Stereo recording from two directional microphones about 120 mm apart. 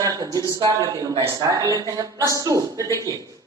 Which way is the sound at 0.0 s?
30° right (ahead or behind).